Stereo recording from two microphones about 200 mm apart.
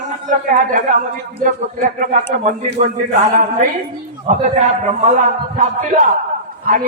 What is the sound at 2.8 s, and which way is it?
A man's voice, 40° right (ahead or behind).